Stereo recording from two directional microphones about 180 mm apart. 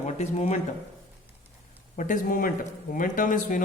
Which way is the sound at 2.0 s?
45° left (ahead or behind).